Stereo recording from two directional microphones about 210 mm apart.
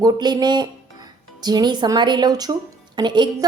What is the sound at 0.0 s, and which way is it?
Speech, 20° right (ahead or behind).